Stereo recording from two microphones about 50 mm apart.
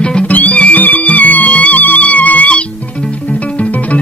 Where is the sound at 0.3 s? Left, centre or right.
Left.